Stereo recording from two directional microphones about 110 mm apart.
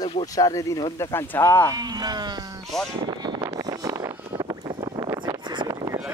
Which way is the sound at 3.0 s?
40° right (ahead or behind).